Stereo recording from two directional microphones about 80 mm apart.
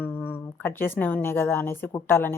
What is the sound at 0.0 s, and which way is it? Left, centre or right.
Speech, left.